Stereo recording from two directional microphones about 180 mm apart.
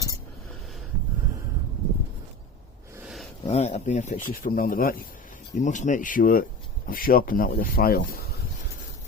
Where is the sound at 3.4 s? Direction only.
40° left (ahead or behind); by 8.0 s 55° left (ahead or behind).